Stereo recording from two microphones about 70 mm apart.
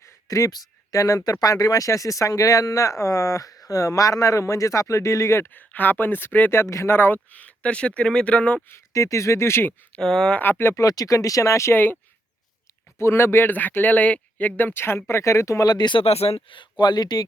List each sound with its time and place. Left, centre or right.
0.0 s speech: left
5.5 s speech: left
8.9 s speech: left
10.0 s speech: centre
10.3 s speech: left
10.8 s speech: left
13.0 s speech: left
15.6 s speech: left